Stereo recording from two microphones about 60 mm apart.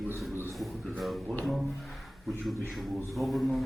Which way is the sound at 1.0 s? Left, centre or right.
Centre.